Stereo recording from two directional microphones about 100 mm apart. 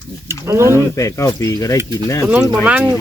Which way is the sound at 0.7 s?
30° left (ahead or behind).